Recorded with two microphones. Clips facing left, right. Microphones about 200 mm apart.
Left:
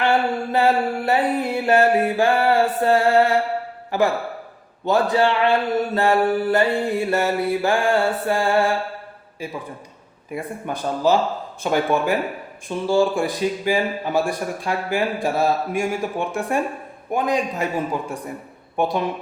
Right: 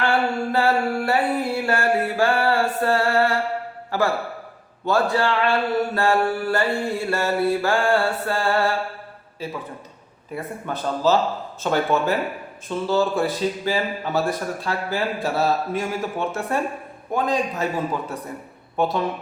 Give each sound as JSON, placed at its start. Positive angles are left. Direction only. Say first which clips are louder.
{"t": 0.0, "sound": "a sound", "louder": "left 2 dB", "side_deg": 20}
{"t": 3.9, "sound": "a man's voice", "louder": "left 2 dB", "side_deg": 20}
{"t": 18.8, "sound": "speech", "louder": "left 1 dB", "side_deg": 15}